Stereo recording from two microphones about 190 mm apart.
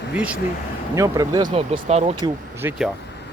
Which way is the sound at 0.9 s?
15° right (ahead or behind).